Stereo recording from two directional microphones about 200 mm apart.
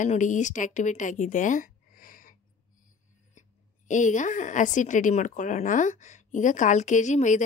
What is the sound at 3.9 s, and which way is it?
Speech, 40° left (ahead or behind).